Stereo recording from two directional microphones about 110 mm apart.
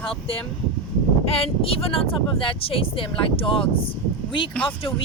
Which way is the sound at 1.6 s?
60° left (ahead or behind).